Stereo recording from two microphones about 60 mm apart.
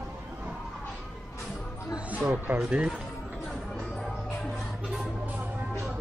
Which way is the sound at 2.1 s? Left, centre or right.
Right.